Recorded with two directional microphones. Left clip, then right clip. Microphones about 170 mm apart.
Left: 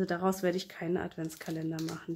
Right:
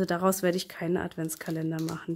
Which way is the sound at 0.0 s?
45° right (ahead or behind).